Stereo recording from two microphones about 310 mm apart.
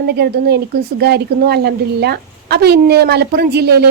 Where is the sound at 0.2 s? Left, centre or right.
Right.